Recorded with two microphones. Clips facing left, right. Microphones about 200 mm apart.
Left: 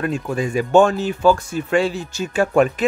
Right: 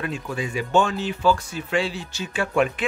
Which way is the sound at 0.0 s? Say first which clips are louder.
Left 6 dB; 45° left (ahead or behind).